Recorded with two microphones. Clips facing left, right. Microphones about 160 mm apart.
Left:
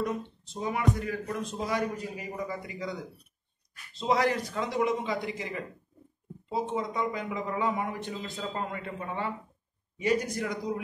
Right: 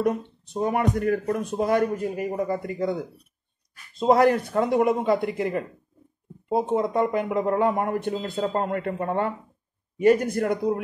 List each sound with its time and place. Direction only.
0.0 s speech: 60° right (ahead or behind)